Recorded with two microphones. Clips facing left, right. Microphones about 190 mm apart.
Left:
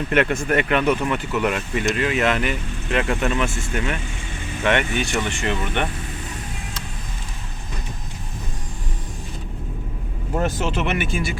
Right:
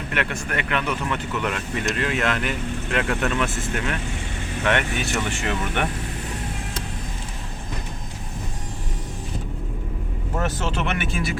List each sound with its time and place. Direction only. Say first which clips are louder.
0.7 s speech: left 6 dB; 20° left (ahead or behind)
1.3 s speech: left 4 dB; 10° left (ahead or behind)
10.3 s speech: left 3 dB; 15° left (ahead or behind)
10.8 s speech: left 2 dB; 5° left (ahead or behind)